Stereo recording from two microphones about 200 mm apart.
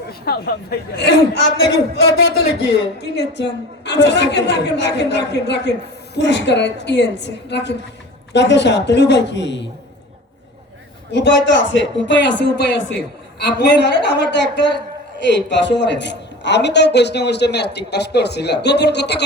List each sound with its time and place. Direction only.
0.1 s a woman's voice: 50° left (ahead or behind)
11.1 s a woman's voice: 60° left (ahead or behind)